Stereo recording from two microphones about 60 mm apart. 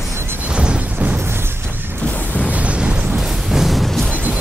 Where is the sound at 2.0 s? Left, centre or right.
Left.